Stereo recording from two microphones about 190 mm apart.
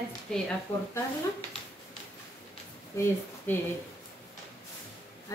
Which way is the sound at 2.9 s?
15° left (ahead or behind).